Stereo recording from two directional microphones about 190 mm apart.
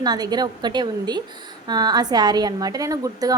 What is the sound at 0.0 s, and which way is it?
A woman's voice, 20° right (ahead or behind).